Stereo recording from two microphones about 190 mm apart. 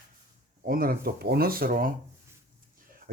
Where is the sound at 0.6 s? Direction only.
50° right (ahead or behind).